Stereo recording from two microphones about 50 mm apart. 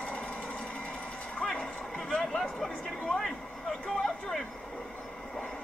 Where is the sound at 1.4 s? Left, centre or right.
Centre.